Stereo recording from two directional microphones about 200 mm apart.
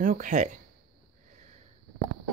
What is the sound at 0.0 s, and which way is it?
Speech, 40° right (ahead or behind).